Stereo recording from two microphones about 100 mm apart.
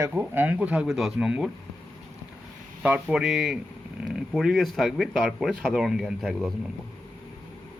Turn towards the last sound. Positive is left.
turn(degrees=5)  # may be behind; listen again after turning